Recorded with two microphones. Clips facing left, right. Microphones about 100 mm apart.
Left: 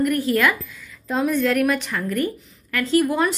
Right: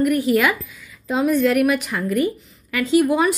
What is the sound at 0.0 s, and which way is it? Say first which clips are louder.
A woman's voice: right 2 dB; 10° right (ahead or behind).